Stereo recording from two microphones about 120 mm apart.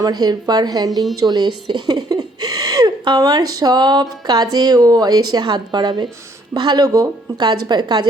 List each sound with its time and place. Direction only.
0.0 s speech: 35° right (ahead or behind)